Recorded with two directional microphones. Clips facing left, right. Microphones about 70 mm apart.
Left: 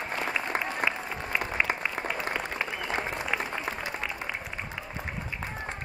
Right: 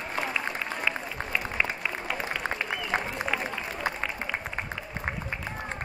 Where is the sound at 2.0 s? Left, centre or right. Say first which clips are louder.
Even; left.